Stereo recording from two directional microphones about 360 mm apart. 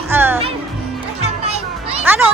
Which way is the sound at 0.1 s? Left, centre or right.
Centre.